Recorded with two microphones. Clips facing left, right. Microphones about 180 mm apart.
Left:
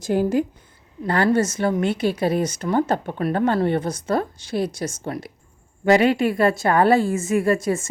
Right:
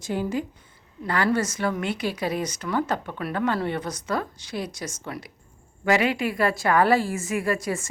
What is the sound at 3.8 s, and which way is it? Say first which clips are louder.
A woman's voice: left 6 dB; 30° left (ahead or behind).